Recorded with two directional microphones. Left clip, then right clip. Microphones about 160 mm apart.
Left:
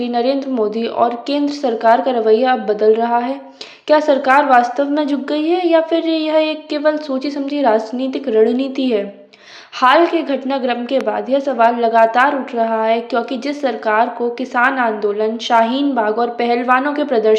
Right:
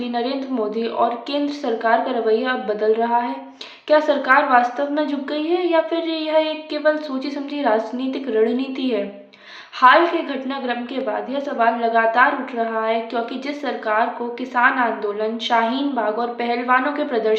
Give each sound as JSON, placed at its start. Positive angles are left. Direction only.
{"t": 0.0, "sound": "a woman's voice", "side_deg": 35}